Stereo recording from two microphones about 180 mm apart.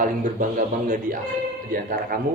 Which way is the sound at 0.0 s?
45° right (ahead or behind).